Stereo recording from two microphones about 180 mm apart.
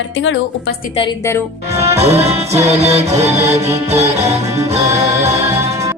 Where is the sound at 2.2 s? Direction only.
35° right (ahead or behind).